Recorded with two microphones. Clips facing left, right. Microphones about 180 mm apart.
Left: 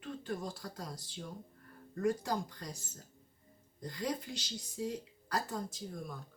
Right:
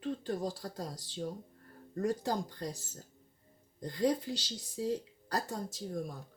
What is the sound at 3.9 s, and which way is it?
Speech, 35° right (ahead or behind).